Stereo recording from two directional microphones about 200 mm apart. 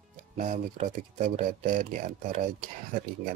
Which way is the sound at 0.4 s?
40° right (ahead or behind).